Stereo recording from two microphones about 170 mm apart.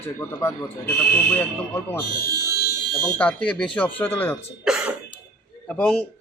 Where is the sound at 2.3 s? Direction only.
70° left (ahead or behind).